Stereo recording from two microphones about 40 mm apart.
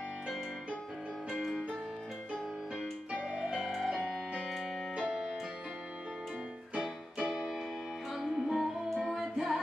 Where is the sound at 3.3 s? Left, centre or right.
Centre.